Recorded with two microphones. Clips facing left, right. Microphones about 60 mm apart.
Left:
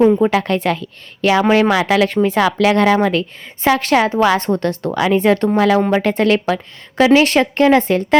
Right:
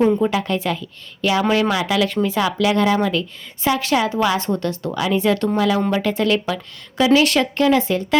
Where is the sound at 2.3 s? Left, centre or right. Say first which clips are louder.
Left 4 dB; left.